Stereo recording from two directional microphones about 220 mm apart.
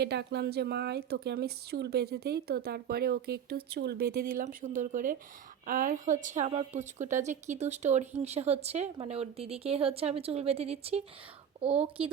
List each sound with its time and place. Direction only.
0.0 s a woman's voice: 50° right (ahead or behind); by 11.0 s 30° right (ahead or behind)